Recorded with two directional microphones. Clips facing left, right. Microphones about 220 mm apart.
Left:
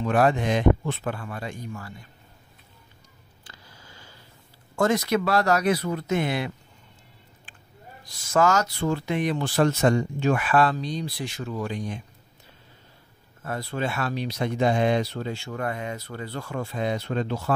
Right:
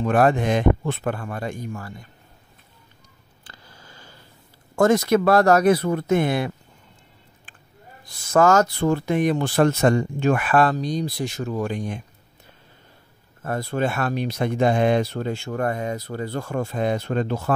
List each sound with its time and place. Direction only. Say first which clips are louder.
0.0 s speech: right 3 dB; 50° right (ahead or behind)
3.4 s a sound: right 2 dB; 50° right (ahead or behind)
4.7 s speech: right 5 dB; 50° right (ahead or behind)
8.0 s speech: right 4 dB; 55° right (ahead or behind)
13.4 s speech: right 5 dB; 45° right (ahead or behind)